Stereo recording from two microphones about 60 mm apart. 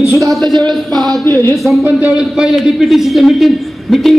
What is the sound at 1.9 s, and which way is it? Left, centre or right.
Speech, centre.